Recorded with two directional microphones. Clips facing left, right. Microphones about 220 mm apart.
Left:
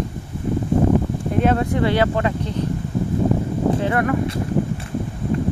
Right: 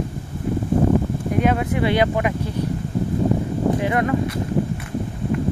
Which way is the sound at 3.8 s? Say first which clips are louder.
Even; 20° right (ahead or behind).